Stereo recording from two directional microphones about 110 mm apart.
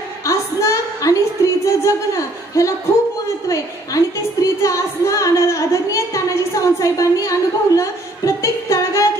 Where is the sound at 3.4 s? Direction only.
30° left (ahead or behind).